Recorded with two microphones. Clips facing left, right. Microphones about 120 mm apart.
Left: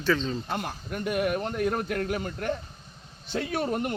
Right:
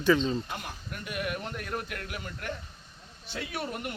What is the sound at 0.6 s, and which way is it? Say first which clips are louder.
A man's voice: left 8 dB; 55° left (ahead or behind).